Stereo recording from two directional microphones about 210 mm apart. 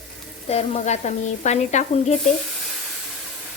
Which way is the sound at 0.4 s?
30° left (ahead or behind).